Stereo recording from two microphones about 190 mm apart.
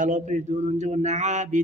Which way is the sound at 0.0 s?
40° right (ahead or behind).